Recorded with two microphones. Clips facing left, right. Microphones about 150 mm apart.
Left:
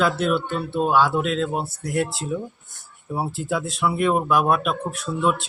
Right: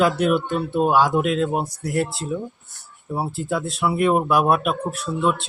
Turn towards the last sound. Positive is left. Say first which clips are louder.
# right 1 dB
turn(degrees=0)  # may be behind; listen again after turning